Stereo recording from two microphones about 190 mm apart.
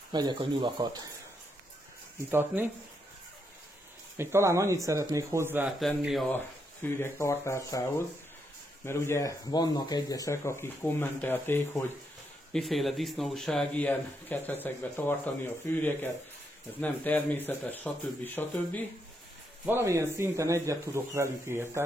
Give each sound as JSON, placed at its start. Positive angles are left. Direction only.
{"t": 0.1, "sound": "speech", "side_deg": -25}
{"t": 2.3, "sound": "speech", "side_deg": -10}
{"t": 4.2, "sound": "speech", "side_deg": -15}
{"t": 6.3, "sound": "speech", "side_deg": 10}
{"t": 8.8, "sound": "speech", "side_deg": 15}
{"t": 12.5, "sound": "speech", "side_deg": 0}
{"t": 19.6, "sound": "speech", "side_deg": -15}